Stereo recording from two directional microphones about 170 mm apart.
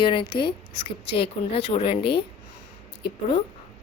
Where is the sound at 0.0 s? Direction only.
30° left (ahead or behind).